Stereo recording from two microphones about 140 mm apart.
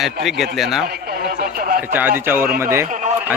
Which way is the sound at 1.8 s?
15° right (ahead or behind).